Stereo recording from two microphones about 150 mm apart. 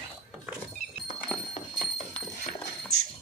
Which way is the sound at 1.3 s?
Centre (ahead or behind).